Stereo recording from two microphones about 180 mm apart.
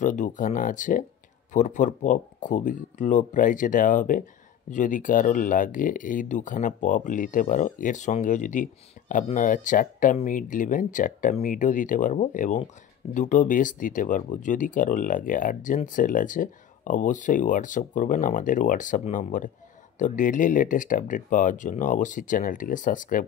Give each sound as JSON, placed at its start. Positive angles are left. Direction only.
{"t": 0.0, "sound": "speech", "side_deg": 45}